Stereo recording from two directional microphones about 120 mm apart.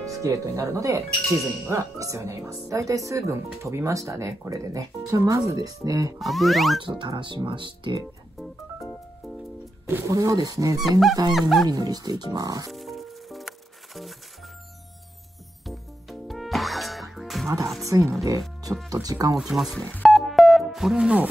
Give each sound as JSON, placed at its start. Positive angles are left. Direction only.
{"t": 0.1, "sound": "speech", "side_deg": -30}
{"t": 6.1, "sound": "speech", "side_deg": 0}
{"t": 6.8, "sound": "speech", "side_deg": -40}
{"t": 8.4, "sound": "music", "side_deg": 0}
{"t": 9.8, "sound": "speech", "side_deg": -25}
{"t": 10.8, "sound": "speech", "side_deg": 0}
{"t": 11.7, "sound": "speech", "side_deg": -35}
{"t": 12.7, "sound": "music", "side_deg": 0}
{"t": 15.6, "sound": "music", "side_deg": 0}
{"t": 17.8, "sound": "speech", "side_deg": -25}
{"t": 19.3, "sound": "speech", "side_deg": -5}
{"t": 20.0, "sound": "music", "side_deg": 0}